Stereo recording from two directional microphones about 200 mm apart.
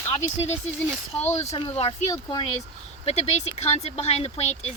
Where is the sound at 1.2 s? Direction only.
30° left (ahead or behind).